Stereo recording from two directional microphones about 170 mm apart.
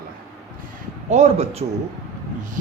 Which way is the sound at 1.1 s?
40° right (ahead or behind).